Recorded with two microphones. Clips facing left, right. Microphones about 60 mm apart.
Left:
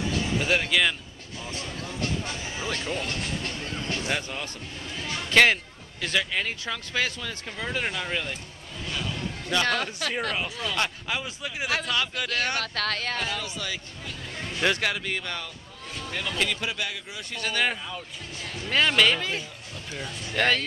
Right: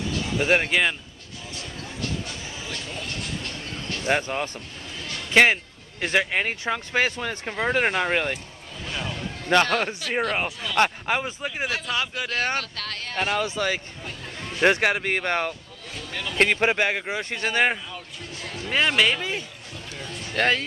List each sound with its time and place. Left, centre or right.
0.4 s speech: right
1.5 s a sound: left
4.0 s speech: right
5.3 s speech: centre
5.9 s speech: right
9.5 s speech: right
11.9 s speech: centre
12.7 s speech: left
13.2 s speech: right
18.7 s speech: centre